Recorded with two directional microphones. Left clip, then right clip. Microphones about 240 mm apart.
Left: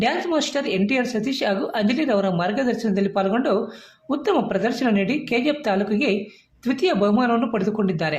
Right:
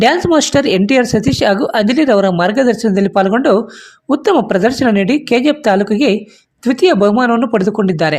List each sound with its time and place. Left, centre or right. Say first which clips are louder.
0.0 s speech: right 11 dB; right